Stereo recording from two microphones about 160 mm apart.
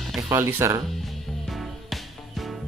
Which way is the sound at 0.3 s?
15° right (ahead or behind).